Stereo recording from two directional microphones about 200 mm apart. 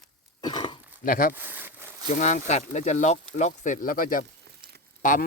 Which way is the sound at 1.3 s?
10° right (ahead or behind).